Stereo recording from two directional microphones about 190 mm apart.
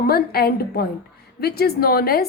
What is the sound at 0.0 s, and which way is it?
A woman's voice, 55° left (ahead or behind).